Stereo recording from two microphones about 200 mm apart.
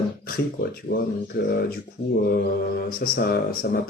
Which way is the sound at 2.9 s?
45° left (ahead or behind).